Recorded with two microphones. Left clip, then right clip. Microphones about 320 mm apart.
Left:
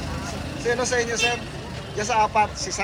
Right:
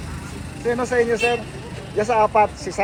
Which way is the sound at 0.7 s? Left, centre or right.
Centre.